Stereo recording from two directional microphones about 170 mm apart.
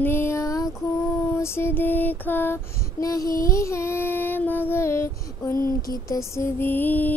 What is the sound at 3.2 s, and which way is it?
Music, 55° left (ahead or behind).